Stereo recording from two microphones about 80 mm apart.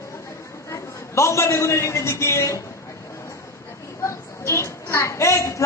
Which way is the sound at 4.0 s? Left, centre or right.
Left.